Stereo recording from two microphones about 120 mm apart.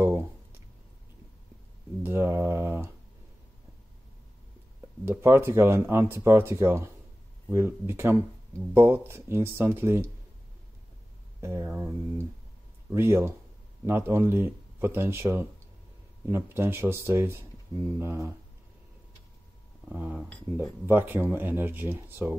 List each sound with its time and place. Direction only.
2.0 s a sound: 20° right (ahead or behind)
5.0 s speech: 20° right (ahead or behind)
11.4 s speech: 20° right (ahead or behind)
19.9 s speech: 10° right (ahead or behind)